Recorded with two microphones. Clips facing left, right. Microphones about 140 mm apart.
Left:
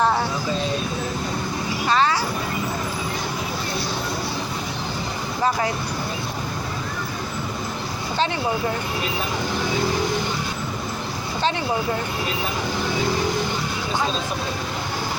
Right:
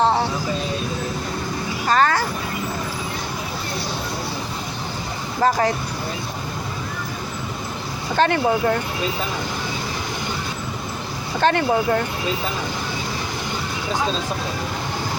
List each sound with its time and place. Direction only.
0.0 s a sound: 25° right (ahead or behind)
1.9 s music: 50° right (ahead or behind)
5.4 s speech: 45° right (ahead or behind)
8.1 s speech: 55° right (ahead or behind)
11.3 s speech: 55° right (ahead or behind)